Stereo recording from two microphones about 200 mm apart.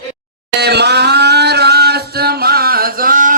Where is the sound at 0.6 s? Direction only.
55° right (ahead or behind).